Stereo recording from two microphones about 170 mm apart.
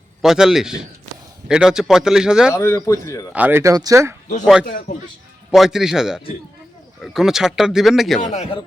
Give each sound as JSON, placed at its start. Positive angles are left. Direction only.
{"t": 0.2, "sound": "speech", "side_deg": -5}
{"t": 2.5, "sound": "speech", "side_deg": 15}
{"t": 3.3, "sound": "speech", "side_deg": -10}
{"t": 5.5, "sound": "speech", "side_deg": -5}
{"t": 8.2, "sound": "a man's voice", "side_deg": 45}